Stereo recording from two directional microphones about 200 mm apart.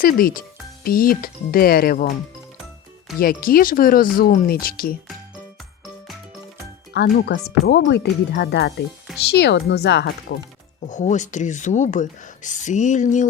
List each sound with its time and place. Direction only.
0.0 s speech: 45° left (ahead or behind)
3.2 s speech: 45° left (ahead or behind)
6.9 s speech: 60° left (ahead or behind)
10.8 s speech: 35° left (ahead or behind)